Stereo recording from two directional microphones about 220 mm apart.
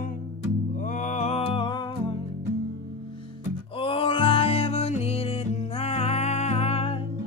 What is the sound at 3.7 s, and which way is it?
Music, 25° left (ahead or behind).